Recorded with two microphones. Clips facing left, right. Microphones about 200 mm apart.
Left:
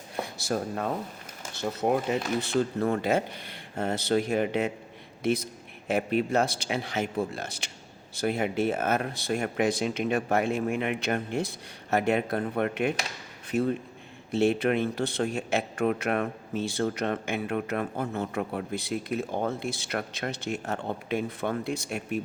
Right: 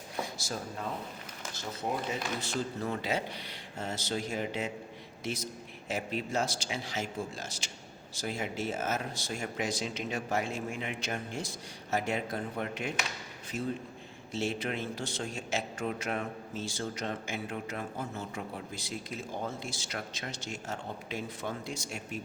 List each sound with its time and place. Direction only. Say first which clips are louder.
0.2 s a man's voice: left 7 dB; 60° left (ahead or behind)